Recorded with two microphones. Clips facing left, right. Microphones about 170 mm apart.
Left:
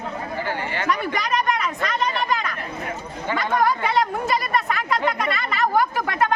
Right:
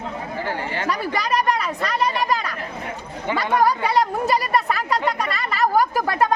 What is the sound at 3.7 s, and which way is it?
Chatter, 35° right (ahead or behind).